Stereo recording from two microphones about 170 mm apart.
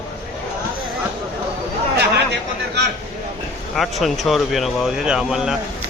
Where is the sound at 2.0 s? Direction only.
85° right.